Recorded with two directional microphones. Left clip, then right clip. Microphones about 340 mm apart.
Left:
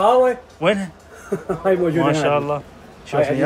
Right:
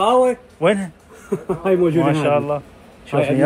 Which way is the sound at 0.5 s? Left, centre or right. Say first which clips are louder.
Right 1 dB; centre.